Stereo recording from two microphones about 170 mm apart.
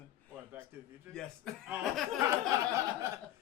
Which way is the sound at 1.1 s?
5° left (ahead or behind).